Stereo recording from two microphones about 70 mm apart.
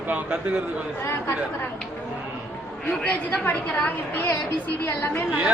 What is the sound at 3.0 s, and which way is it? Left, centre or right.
A woman's voice, left.